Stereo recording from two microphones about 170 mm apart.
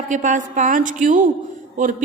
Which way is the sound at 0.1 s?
50° right (ahead or behind).